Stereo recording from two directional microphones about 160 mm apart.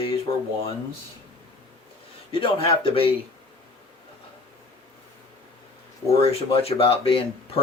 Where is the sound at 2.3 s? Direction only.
35° left (ahead or behind).